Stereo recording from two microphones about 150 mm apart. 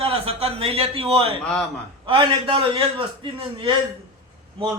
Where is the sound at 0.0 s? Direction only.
40° right (ahead or behind).